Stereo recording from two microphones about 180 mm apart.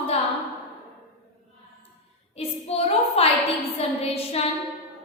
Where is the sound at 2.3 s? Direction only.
35° left (ahead or behind).